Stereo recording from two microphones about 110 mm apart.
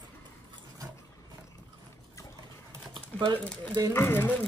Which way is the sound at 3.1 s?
50° right (ahead or behind).